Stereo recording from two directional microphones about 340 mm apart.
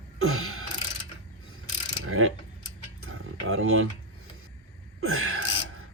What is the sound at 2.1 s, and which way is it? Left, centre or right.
Speech, right.